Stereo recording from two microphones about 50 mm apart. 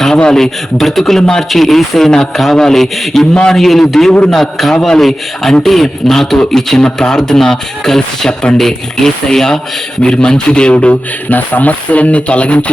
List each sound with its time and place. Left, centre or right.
0.2 s speech: centre
11.3 s speech: left